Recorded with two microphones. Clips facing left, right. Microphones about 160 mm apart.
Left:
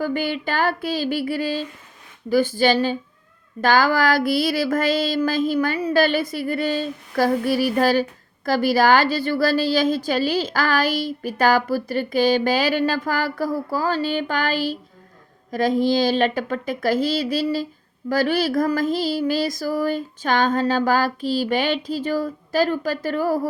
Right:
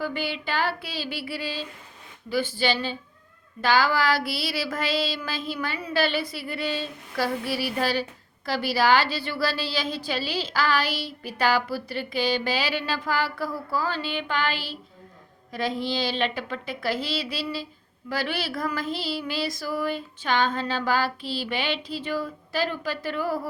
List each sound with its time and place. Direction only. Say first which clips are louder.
0.0 s a woman's voice: left 6 dB; 45° left (ahead or behind)